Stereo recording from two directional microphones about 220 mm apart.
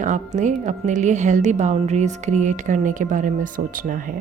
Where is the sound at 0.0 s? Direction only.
35° right (ahead or behind).